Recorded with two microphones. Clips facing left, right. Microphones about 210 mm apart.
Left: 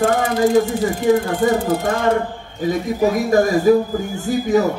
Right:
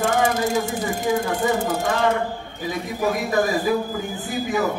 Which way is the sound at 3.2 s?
45° left (ahead or behind).